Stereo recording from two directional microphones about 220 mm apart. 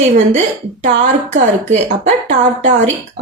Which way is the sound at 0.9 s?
35° right (ahead or behind).